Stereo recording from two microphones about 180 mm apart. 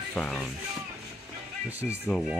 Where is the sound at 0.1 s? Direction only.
5° left (ahead or behind).